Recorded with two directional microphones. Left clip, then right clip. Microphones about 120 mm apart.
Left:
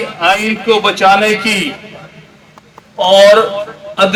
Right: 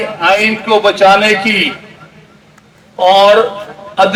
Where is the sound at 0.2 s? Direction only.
15° left (ahead or behind).